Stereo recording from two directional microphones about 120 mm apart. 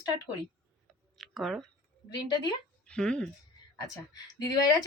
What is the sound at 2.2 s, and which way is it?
Speech, 35° left (ahead or behind).